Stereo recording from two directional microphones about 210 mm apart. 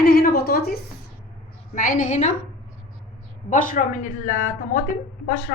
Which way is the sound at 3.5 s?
40° left (ahead or behind).